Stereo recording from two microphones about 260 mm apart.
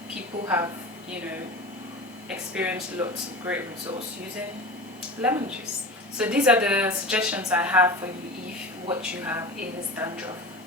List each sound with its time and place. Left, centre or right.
0.1 s a sound: centre
2.6 s speech: centre
5.2 s a woman's voice: centre